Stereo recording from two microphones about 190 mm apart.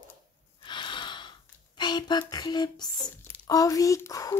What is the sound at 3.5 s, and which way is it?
Speech, 20° left (ahead or behind).